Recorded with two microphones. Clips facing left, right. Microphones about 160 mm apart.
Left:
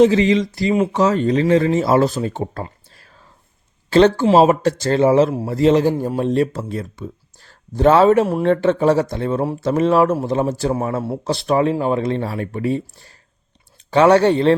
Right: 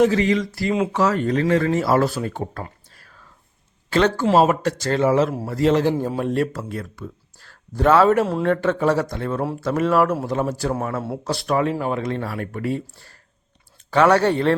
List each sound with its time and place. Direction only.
0.0 s speech: 20° left (ahead or behind)
3.8 s speech: 30° left (ahead or behind)
5.8 s a man's voice: 10° left (ahead or behind)
6.1 s speech: 20° left (ahead or behind)